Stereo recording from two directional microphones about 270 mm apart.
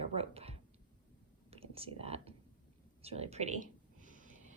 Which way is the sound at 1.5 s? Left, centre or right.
Right.